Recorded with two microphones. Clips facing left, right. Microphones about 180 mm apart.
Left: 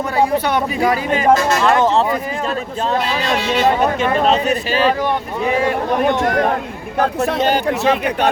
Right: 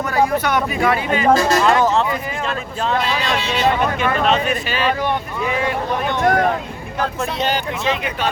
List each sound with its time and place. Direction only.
0.2 s speech: 30° left (ahead or behind)
1.3 s speech: 35° right (ahead or behind)
1.8 s speech: 35° left (ahead or behind)
3.5 s speech: 40° left (ahead or behind)
6.0 s speech: 50° left (ahead or behind)